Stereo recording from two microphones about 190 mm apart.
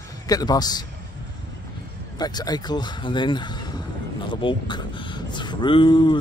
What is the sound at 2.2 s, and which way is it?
Speech, 20° left (ahead or behind).